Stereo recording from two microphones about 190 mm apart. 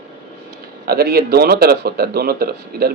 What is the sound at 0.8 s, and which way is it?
Speech, 55° right (ahead or behind).